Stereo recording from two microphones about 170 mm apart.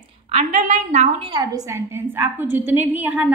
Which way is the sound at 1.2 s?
25° right (ahead or behind).